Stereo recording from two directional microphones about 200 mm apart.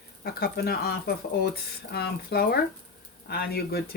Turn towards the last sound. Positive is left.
turn(degrees=50)  # may be behind; listen again after turning